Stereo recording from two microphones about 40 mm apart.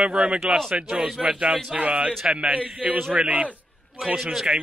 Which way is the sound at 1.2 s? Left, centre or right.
Right.